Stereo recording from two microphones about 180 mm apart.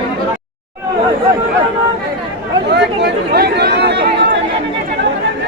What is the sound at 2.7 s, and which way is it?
Chatter, 70° right (ahead or behind).